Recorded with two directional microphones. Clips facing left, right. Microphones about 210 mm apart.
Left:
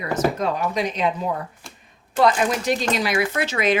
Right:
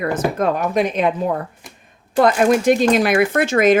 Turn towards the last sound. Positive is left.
turn(degrees=-50)  # may be behind; listen again after turning